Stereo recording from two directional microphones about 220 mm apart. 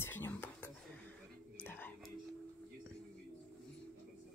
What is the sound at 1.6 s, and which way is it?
Whispering, 10° left (ahead or behind).